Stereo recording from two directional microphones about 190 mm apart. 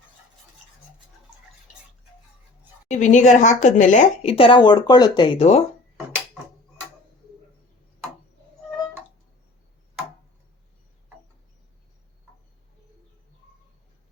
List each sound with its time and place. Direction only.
2.9 s speech: 40° left (ahead or behind)